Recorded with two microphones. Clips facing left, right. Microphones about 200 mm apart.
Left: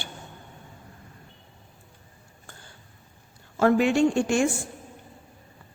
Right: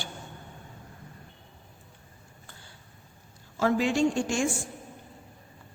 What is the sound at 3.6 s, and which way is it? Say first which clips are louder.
A woman's voice: left 4 dB; 60° left (ahead or behind).